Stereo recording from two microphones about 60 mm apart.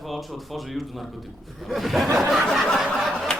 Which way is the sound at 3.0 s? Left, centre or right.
Centre.